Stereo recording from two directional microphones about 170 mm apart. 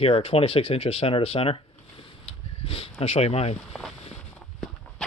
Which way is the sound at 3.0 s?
35° left (ahead or behind).